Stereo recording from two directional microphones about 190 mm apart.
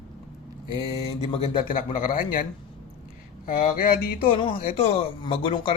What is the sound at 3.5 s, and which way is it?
Speech, 50° left (ahead or behind).